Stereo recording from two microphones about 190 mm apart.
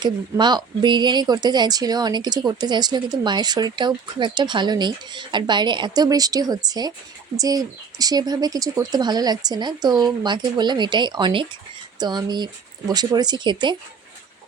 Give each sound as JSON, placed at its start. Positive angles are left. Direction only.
{"t": 0.0, "sound": "speech", "side_deg": -20}